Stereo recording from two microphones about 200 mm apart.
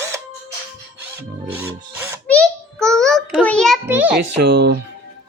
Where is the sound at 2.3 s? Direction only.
5° left (ahead or behind).